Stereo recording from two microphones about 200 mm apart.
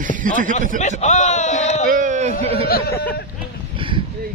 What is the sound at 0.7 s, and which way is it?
Speech, 35° left (ahead or behind).